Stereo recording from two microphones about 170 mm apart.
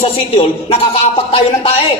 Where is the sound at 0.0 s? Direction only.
35° left (ahead or behind).